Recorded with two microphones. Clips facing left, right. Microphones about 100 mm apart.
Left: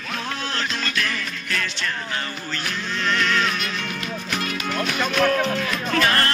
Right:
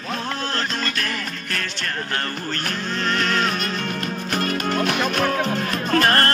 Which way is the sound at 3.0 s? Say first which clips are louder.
Even; 40° right (ahead or behind).